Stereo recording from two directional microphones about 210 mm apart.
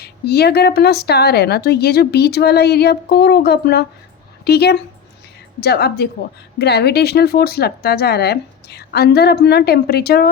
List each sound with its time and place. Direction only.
0.0 s a woman's voice: 50° left (ahead or behind)